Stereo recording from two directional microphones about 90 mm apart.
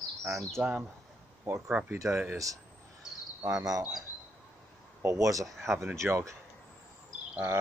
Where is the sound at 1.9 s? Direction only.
35° right (ahead or behind).